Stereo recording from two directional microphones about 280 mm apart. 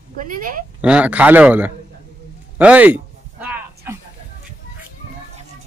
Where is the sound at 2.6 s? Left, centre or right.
Centre.